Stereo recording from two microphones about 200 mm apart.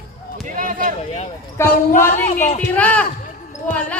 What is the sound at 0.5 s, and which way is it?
Speech, 40° right (ahead or behind).